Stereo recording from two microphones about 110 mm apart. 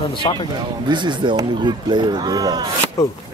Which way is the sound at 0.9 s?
45° right (ahead or behind).